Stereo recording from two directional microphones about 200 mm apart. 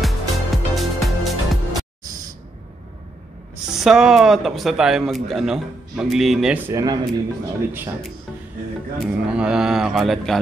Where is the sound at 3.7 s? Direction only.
Centre (ahead or behind).